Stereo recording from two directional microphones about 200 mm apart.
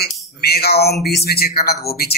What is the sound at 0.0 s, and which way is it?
Speech, 50° left (ahead or behind).